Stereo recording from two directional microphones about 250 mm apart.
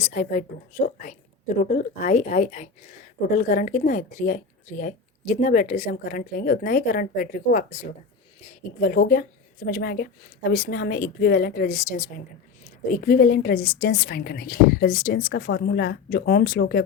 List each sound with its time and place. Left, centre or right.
0.0 s a woman's voice: left